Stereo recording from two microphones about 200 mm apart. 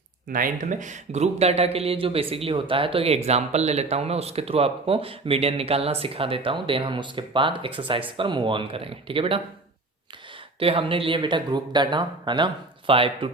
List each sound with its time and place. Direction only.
0.3 s speech: 45° right (ahead or behind); by 9.4 s 25° right (ahead or behind)
10.6 s speech: 25° right (ahead or behind)